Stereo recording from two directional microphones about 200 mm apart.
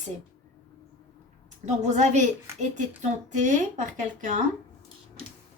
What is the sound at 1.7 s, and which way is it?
Speech, 35° right (ahead or behind).